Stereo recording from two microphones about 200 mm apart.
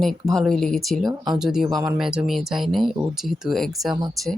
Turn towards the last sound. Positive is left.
turn(degrees=0)  # may be behind; listen again after turning